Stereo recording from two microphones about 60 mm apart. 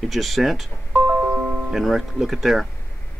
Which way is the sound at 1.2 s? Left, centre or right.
Right.